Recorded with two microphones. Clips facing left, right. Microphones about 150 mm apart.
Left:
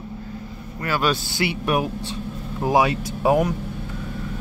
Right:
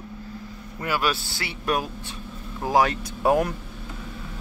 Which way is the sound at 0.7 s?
10° right (ahead or behind).